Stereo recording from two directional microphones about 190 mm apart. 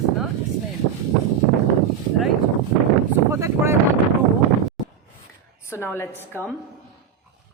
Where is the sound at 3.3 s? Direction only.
15° right (ahead or behind).